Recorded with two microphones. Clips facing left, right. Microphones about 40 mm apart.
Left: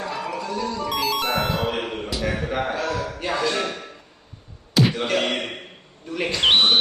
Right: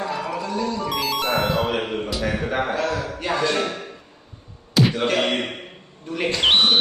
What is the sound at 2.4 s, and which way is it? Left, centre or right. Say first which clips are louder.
Speech: right 2 dB; centre.